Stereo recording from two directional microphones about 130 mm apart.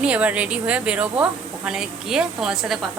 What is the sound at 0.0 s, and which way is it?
A woman's voice, 10° right (ahead or behind).